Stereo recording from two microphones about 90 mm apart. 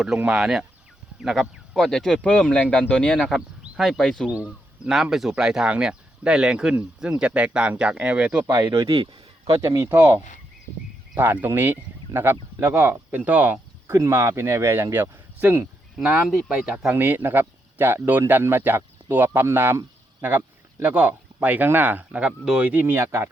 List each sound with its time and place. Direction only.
0.3 s speech: 5° right (ahead or behind)
4.8 s speech: 5° right (ahead or behind)
8.5 s speech: 40° right (ahead or behind)
8.9 s speech: 90° right
9.6 s speech: 35° right (ahead or behind)
11.2 s speech: 20° right (ahead or behind)
13.1 s speech: 15° right (ahead or behind)
13.8 s speech: 35° right (ahead or behind)
16.0 s speech: 5° right (ahead or behind)
16.9 s speech: 20° right (ahead or behind)